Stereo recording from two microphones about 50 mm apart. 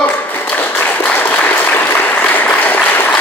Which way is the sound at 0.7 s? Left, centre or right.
Left.